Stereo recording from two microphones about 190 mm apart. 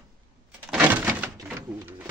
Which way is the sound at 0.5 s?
5° right (ahead or behind).